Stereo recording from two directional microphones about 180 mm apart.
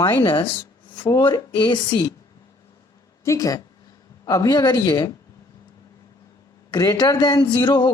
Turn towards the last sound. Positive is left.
turn(degrees=25)  # may be behind; listen again after turning